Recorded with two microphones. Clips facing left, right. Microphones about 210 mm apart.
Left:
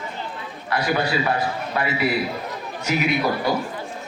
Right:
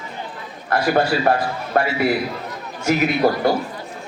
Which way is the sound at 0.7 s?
50° right (ahead or behind).